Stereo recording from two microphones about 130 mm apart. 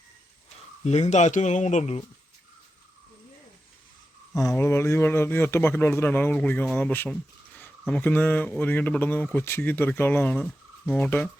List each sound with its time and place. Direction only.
0.9 s speech: 60° left (ahead or behind)
4.4 s speech: 20° left (ahead or behind)